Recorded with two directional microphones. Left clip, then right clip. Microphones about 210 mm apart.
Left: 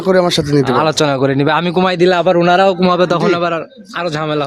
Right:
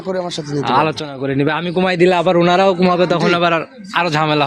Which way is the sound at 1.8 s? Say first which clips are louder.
Right 1 dB; 15° left (ahead or behind).